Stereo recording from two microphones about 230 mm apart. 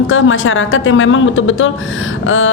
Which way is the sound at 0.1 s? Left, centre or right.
Left.